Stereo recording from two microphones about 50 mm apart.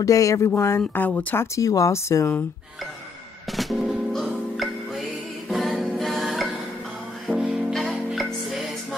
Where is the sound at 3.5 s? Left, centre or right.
Centre.